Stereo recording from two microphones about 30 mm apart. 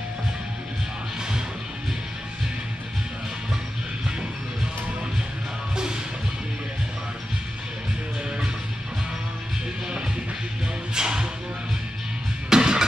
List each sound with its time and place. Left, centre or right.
11.0 s music: right
12.4 s music: right